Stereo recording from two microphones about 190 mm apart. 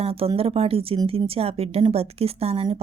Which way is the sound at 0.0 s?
30° right (ahead or behind).